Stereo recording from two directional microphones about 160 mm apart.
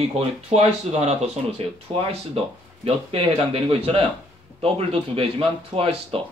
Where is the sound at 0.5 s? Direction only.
45° right (ahead or behind).